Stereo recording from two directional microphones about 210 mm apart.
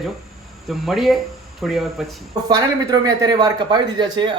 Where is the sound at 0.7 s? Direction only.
Centre (ahead or behind).